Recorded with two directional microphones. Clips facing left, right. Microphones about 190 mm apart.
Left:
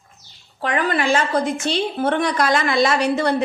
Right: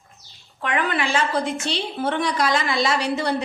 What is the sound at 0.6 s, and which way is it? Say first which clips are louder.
Speech: left 3 dB; 35° left (ahead or behind).